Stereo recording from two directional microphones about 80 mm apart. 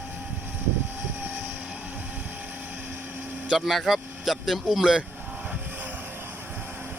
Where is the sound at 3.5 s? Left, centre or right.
Centre.